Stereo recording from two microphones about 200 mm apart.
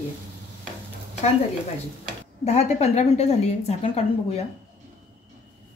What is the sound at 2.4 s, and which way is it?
A woman's voice, 35° left (ahead or behind).